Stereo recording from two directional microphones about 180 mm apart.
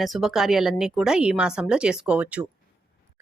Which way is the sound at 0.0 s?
Centre (ahead or behind).